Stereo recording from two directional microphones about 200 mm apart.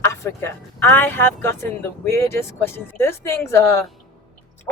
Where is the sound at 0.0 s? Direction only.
15° left (ahead or behind).